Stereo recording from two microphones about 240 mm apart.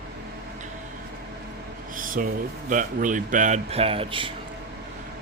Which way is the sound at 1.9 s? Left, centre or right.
Right.